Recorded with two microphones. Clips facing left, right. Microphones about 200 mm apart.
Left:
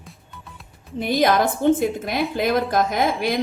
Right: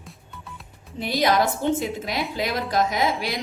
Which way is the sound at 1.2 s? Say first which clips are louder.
Left 3 dB; 50° left (ahead or behind).